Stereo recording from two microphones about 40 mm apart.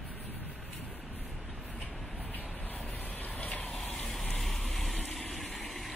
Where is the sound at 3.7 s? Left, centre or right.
Centre.